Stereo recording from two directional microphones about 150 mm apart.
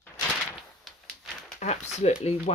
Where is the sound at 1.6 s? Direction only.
45° left (ahead or behind).